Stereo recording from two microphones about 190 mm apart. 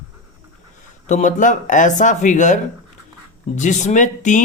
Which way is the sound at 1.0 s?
40° left (ahead or behind).